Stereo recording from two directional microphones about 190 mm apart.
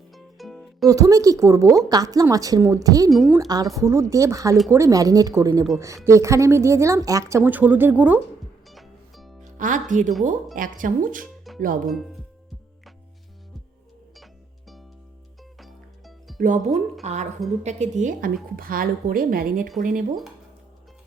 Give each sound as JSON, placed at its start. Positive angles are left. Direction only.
{"t": 0.1, "sound": "music", "side_deg": 0}
{"t": 0.9, "sound": "a woman's voice", "side_deg": -15}
{"t": 3.1, "sound": "speech", "side_deg": 0}
{"t": 3.3, "sound": "a woman's voice", "side_deg": -20}
{"t": 8.7, "sound": "music", "side_deg": 0}
{"t": 9.4, "sound": "music", "side_deg": -45}
{"t": 10.2, "sound": "a woman's voice", "side_deg": -45}
{"t": 15.5, "sound": "music", "side_deg": 0}
{"t": 16.4, "sound": "a woman's voice", "side_deg": -40}
{"t": 18.5, "sound": "a woman's voice", "side_deg": -50}